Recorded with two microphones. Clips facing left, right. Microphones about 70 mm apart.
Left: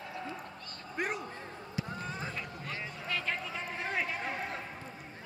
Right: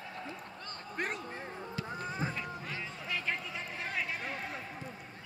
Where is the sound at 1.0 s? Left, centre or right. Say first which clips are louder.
Left 2 dB; centre.